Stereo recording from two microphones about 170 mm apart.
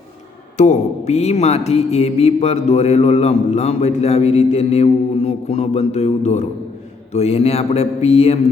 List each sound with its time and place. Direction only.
0.5 s mantra: 45° left (ahead or behind)